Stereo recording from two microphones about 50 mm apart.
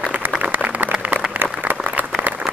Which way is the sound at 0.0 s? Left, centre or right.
Right.